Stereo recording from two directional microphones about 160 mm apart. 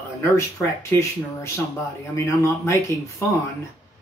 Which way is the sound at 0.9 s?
15° left (ahead or behind).